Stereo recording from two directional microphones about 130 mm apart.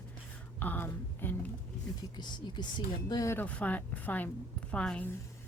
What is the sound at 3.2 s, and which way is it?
Speech, 15° left (ahead or behind).